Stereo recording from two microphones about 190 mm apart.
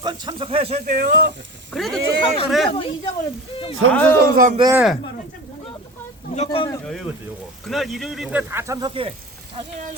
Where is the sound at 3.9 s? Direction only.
10° left (ahead or behind).